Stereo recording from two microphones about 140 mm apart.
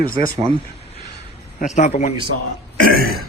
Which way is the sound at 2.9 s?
90° right.